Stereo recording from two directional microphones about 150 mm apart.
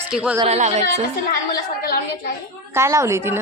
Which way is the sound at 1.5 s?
90° left.